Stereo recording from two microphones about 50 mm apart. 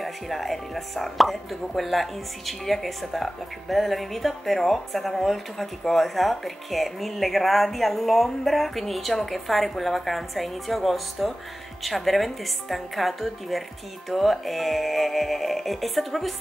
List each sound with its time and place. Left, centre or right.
0.0 s speech: centre